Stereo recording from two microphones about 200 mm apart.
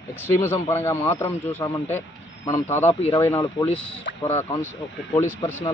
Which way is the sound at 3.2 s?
10° left (ahead or behind).